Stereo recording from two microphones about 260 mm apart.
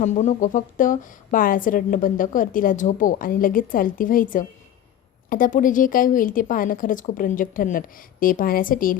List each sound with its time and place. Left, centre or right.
0.0 s a woman's voice: left